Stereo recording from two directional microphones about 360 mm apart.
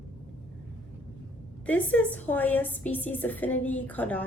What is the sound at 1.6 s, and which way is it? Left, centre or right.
A woman's voice, centre.